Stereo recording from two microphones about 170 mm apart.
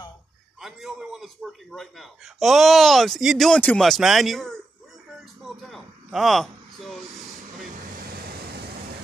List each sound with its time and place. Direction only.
0.6 s a man's voice: centre (ahead or behind)
5.6 s a man's voice: centre (ahead or behind)
7.9 s waves: 60° right (ahead or behind)